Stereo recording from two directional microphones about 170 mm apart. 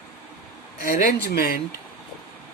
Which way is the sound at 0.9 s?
65° left (ahead or behind).